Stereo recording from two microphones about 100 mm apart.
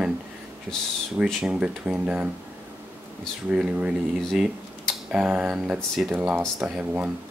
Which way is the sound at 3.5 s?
10° right (ahead or behind).